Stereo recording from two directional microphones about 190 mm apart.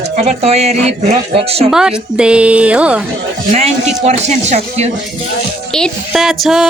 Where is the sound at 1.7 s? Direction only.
5° right (ahead or behind).